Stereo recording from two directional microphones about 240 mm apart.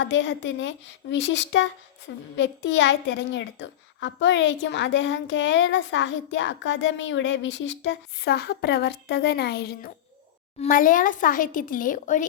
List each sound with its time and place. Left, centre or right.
0.0 s a woman's voice: left